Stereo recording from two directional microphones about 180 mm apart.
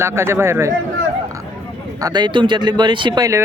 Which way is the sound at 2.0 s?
25° right (ahead or behind).